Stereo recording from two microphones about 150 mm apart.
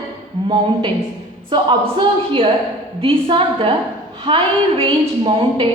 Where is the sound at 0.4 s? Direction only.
30° right (ahead or behind).